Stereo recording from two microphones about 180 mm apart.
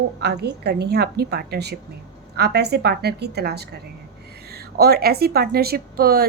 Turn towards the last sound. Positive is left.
turn(degrees=-60)  # may be behind; listen again after turning